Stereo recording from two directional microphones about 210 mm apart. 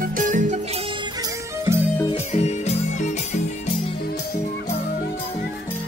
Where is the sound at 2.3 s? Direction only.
30° left (ahead or behind).